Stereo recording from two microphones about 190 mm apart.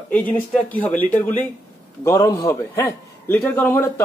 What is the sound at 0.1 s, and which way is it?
A man's voice, 10° left (ahead or behind).